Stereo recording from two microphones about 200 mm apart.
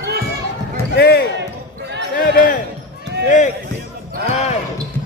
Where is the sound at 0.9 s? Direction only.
55° left (ahead or behind).